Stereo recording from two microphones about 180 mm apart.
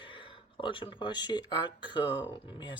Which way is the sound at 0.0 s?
30° left (ahead or behind).